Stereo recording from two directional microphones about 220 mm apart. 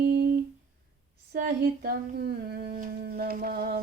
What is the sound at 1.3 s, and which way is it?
Humming, 40° right (ahead or behind).